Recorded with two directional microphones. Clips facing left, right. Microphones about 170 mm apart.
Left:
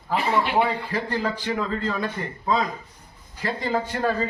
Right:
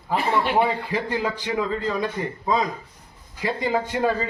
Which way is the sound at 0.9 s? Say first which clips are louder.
Right 1 dB; 15° right (ahead or behind).